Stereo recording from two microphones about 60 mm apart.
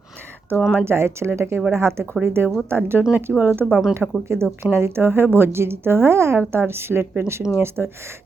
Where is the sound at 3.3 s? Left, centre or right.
Centre.